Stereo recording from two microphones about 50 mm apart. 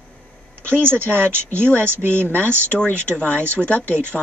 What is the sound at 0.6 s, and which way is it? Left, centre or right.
Speech, right.